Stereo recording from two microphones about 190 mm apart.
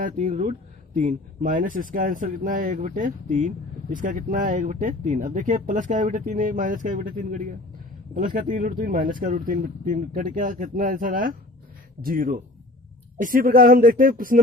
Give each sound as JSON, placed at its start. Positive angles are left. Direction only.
{"t": 0.0, "sound": "speech", "side_deg": -40}